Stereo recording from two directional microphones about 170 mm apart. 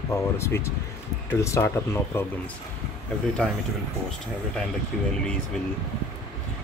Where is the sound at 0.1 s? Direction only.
15° left (ahead or behind).